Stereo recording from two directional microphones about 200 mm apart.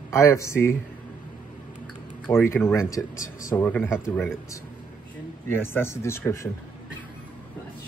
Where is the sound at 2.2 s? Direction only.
10° left (ahead or behind).